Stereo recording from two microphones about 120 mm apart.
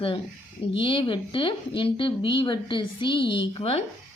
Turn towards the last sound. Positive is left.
turn(degrees=50)  # may be behind; listen again after turning